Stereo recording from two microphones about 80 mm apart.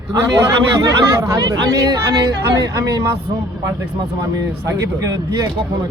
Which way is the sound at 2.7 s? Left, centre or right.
Right.